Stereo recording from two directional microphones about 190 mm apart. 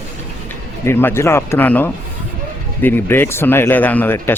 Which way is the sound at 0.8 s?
10° left (ahead or behind).